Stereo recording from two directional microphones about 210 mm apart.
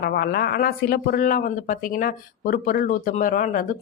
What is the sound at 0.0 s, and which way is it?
Speech, 45° left (ahead or behind).